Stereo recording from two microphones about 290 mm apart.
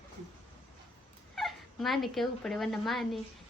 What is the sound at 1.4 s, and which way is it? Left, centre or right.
A woman's voice, centre.